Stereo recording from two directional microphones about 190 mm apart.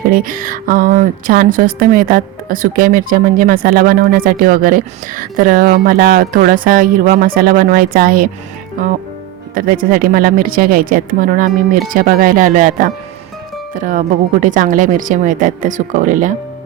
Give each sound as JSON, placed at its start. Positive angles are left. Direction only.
{"t": 0.1, "sound": "a woman's voice", "side_deg": -50}
{"t": 9.6, "sound": "a woman's voice", "side_deg": -45}